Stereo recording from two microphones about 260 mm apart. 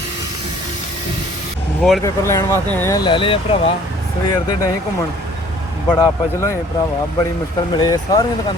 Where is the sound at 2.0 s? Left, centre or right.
Centre.